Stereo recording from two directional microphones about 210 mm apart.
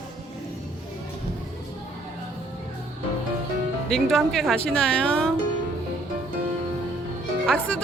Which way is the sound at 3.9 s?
Centre (ahead or behind).